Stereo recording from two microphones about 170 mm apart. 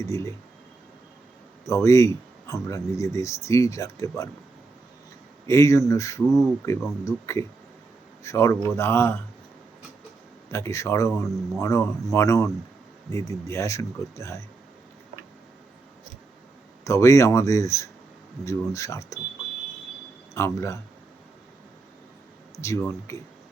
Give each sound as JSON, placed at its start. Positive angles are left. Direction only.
{"t": 0.0, "sound": "speech", "side_deg": 15}
{"t": 1.6, "sound": "speech", "side_deg": 20}
{"t": 5.5, "sound": "speech", "side_deg": 15}
{"t": 10.5, "sound": "speech", "side_deg": 15}
{"t": 16.8, "sound": "speech", "side_deg": 20}
{"t": 20.3, "sound": "speech", "side_deg": 15}
{"t": 22.6, "sound": "speech", "side_deg": 15}